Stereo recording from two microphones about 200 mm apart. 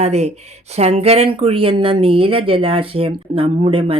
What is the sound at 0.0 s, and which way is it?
Speech, 30° right (ahead or behind).